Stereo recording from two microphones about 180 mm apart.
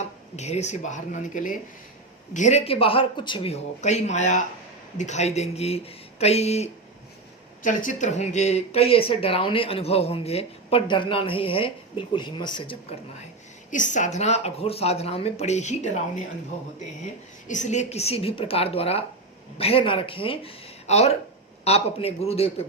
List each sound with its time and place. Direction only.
0.0 s speech: 40° left (ahead or behind)
13.7 s speech: 45° left (ahead or behind)
17.5 s speech: 40° left (ahead or behind)